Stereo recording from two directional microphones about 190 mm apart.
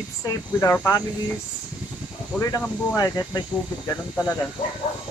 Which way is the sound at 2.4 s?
15° left (ahead or behind).